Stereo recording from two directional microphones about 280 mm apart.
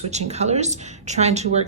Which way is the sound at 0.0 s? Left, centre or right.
Right.